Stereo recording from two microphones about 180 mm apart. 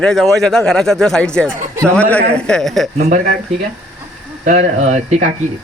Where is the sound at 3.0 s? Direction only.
50° right (ahead or behind).